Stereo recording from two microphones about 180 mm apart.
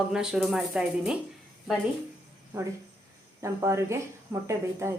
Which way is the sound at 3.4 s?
15° right (ahead or behind).